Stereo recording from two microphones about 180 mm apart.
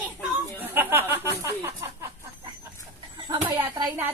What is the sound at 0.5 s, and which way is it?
Speech, 10° right (ahead or behind).